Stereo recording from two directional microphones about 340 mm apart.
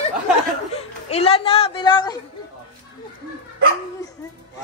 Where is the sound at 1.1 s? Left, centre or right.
Centre.